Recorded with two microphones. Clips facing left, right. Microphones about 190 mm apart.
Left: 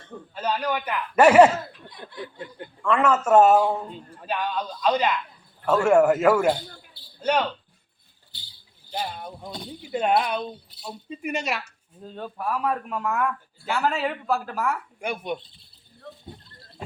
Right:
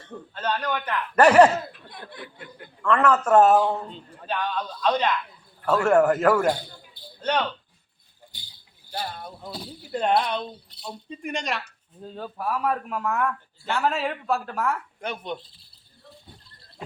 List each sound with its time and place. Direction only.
0.1 s a man's voice: 10° left (ahead or behind)
1.9 s chuckle: 55° right (ahead or behind)
2.8 s a man's voice: 10° left (ahead or behind)
8.3 s a sound: 15° right (ahead or behind)
8.9 s a man's voice: 10° left (ahead or behind)
9.4 s a man's voice: 5° right (ahead or behind)
15.4 s speech: centre (ahead or behind)
16.5 s a sound: centre (ahead or behind)